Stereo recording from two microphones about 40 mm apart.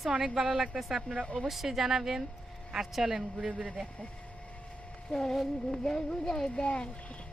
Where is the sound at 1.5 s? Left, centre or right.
Centre.